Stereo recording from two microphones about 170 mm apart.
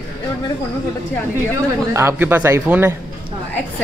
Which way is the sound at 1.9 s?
15° right (ahead or behind).